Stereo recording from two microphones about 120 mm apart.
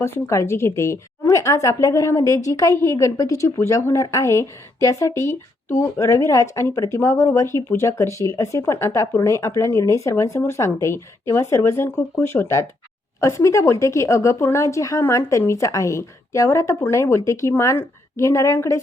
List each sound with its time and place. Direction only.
0.0 s a woman's voice: 20° left (ahead or behind)